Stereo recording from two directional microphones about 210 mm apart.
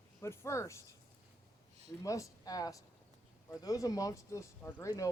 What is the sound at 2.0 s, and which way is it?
Speech, 15° left (ahead or behind).